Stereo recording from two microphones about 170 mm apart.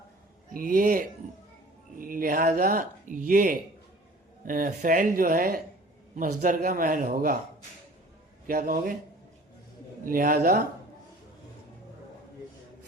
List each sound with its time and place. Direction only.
0.5 s a man's voice: 55° right (ahead or behind)
8.4 s a man's voice: 55° right (ahead or behind)
10.1 s speech: 55° right (ahead or behind)